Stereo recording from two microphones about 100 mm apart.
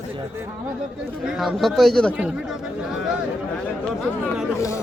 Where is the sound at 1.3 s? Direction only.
Centre (ahead or behind).